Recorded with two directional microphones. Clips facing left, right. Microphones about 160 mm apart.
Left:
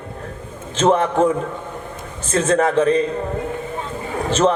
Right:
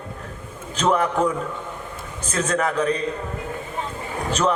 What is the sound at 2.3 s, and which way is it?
Speech, 25° left (ahead or behind).